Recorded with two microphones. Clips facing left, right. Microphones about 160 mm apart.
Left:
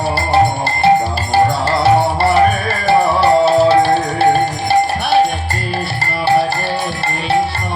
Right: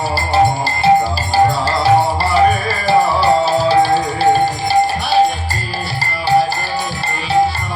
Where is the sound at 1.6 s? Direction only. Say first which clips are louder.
Left 1 dB; 60° left (ahead or behind).